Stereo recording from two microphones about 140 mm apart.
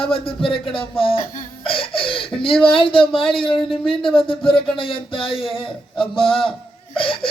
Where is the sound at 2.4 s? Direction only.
40° left (ahead or behind).